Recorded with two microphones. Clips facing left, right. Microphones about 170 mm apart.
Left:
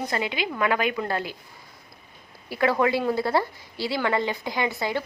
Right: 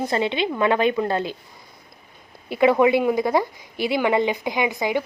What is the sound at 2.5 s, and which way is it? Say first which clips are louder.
A woman's voice: right 6 dB; 20° right (ahead or behind).